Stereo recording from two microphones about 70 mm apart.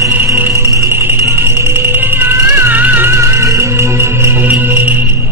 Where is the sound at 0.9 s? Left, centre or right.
Right.